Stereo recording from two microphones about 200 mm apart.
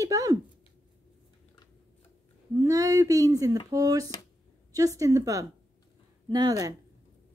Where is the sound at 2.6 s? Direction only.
15° right (ahead or behind).